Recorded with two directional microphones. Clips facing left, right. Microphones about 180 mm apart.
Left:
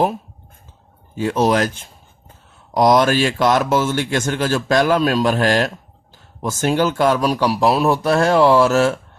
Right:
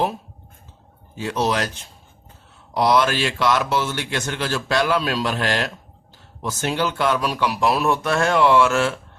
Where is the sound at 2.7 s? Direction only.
45° left (ahead or behind).